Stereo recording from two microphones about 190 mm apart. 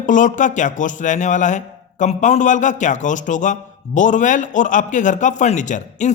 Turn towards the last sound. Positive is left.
turn(degrees=40)  # may be behind; listen again after turning